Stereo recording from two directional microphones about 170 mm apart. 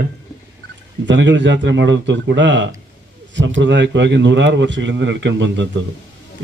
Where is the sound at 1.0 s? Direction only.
90° right.